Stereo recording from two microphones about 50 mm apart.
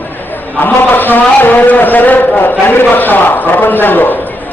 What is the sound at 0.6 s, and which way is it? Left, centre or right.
A man's voice, left.